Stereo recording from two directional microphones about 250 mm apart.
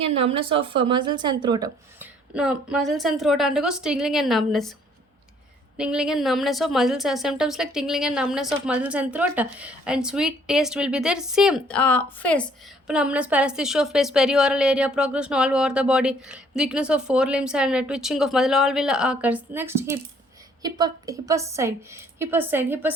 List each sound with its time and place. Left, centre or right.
0.0 s a woman's voice: right
2.3 s a woman's voice: centre
5.7 s a woman's voice: centre